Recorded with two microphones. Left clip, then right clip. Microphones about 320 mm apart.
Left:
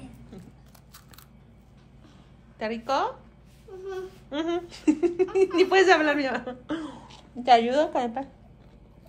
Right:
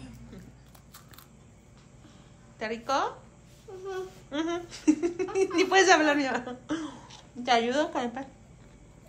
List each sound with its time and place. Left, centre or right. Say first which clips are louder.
2.6 s speech: left 2 dB; centre